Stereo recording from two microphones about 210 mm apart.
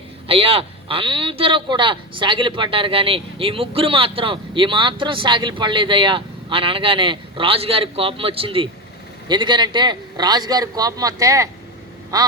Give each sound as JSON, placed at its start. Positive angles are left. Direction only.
{"t": 0.3, "sound": "a man's voice", "side_deg": -25}
{"t": 12.1, "sound": "quack", "side_deg": -15}